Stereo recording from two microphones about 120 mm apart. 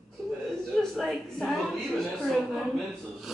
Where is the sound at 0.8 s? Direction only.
Centre (ahead or behind).